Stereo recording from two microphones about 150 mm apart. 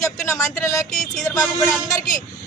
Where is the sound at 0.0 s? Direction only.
20° left (ahead or behind).